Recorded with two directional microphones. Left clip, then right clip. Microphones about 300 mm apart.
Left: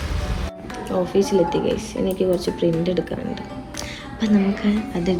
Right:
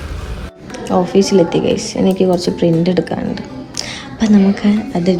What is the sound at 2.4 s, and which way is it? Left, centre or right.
Speech, centre.